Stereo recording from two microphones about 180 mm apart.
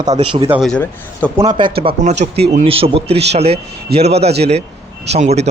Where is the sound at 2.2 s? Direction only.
35° right (ahead or behind).